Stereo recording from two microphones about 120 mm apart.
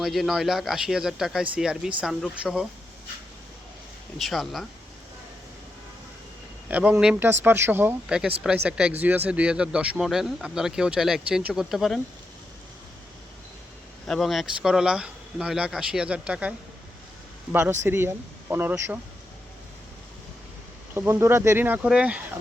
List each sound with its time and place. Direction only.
0.0 s speech: centre (ahead or behind)
4.2 s speech: centre (ahead or behind)
6.7 s speech: 15° right (ahead or behind)
8.4 s speech: 5° right (ahead or behind)
14.1 s speech: centre (ahead or behind); by 18.9 s 15° right (ahead or behind)
20.9 s speech: 20° right (ahead or behind)